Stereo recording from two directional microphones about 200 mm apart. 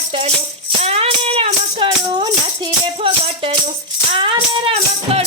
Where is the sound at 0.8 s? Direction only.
30° right (ahead or behind).